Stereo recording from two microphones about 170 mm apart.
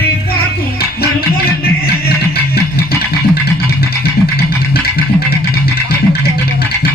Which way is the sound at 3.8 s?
65° left (ahead or behind).